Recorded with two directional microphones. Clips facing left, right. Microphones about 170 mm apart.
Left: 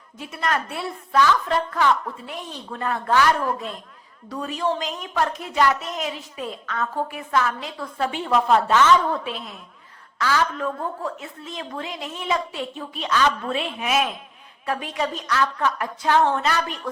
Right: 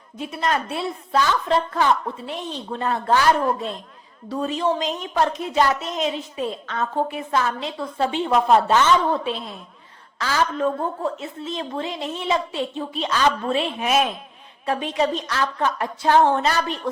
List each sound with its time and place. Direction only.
0.2 s a woman's voice: 20° right (ahead or behind); by 14.1 s 35° right (ahead or behind)
14.7 s a woman's voice: 25° right (ahead or behind)